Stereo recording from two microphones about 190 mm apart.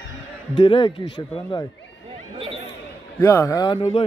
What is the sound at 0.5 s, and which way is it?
Speech, 25° left (ahead or behind).